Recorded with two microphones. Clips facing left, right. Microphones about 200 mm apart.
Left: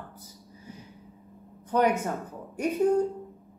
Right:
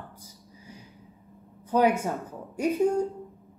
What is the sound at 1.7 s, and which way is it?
Speech, 10° right (ahead or behind).